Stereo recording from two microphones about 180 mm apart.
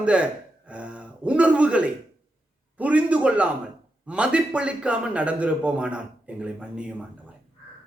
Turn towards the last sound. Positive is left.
turn(degrees=-5)  # may be behind; listen again after turning